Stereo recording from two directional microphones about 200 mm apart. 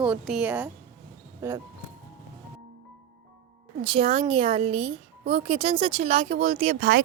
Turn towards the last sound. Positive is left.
turn(degrees=-40)  # may be behind; listen again after turning